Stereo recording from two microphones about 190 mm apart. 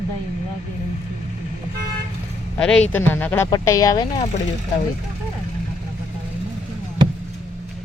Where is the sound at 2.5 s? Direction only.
5° left (ahead or behind); by 4.2 s 20° left (ahead or behind).